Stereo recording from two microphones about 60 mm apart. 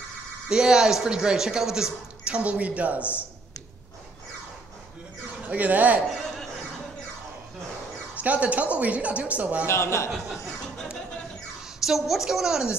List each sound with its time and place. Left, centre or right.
0.5 s speech: centre
5.5 s speech: right
8.2 s speech: right
9.7 s speech: left
10.1 s speech: centre
11.8 s a woman's voice: centre